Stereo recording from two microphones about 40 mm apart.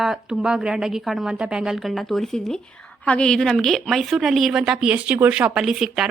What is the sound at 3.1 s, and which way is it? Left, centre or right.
Speech, left.